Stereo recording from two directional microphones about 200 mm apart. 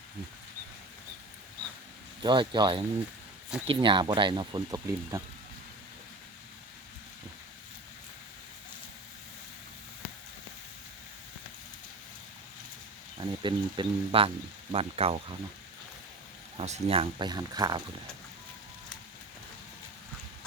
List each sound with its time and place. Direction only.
2.2 s speech: 25° right (ahead or behind)
13.1 s speech: 25° right (ahead or behind)
16.6 s speech: 30° right (ahead or behind)